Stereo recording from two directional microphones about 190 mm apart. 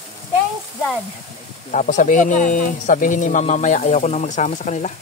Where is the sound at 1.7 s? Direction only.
40° left (ahead or behind).